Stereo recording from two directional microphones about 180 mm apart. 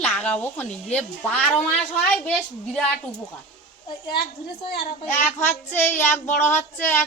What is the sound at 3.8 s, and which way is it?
Speech, 25° left (ahead or behind).